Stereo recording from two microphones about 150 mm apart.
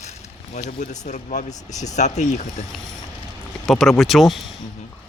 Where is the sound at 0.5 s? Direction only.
50° left (ahead or behind).